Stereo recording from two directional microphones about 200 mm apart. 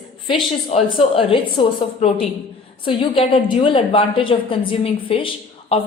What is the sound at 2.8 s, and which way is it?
A woman's voice, 25° left (ahead or behind).